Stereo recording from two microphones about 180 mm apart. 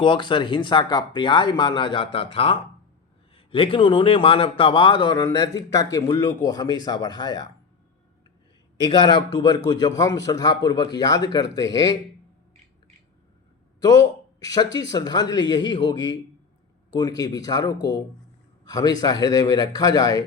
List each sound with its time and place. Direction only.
0.0 s a man's voice: 25° left (ahead or behind)
8.8 s a man's voice: 25° left (ahead or behind)
13.8 s a man's voice: 20° left (ahead or behind)